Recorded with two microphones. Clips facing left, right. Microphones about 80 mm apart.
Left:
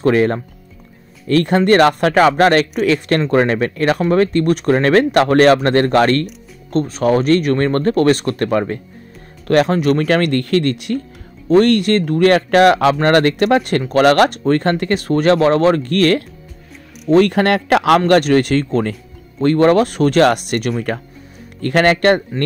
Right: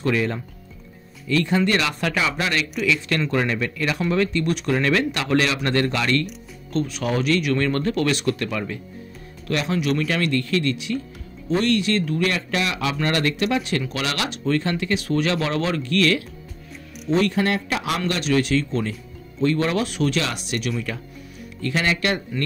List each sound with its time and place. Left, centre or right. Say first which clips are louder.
0.0 s speech: left 9 dB; left